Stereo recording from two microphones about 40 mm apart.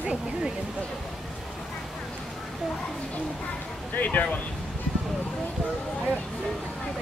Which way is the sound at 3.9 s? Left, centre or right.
Left.